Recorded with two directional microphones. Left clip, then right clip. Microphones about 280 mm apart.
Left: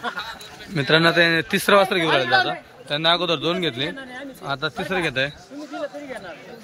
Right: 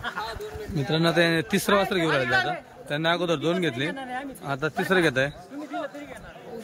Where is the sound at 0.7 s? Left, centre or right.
Centre.